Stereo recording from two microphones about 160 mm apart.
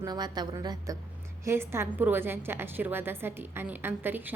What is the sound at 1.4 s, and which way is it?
A woman's voice, 15° right (ahead or behind).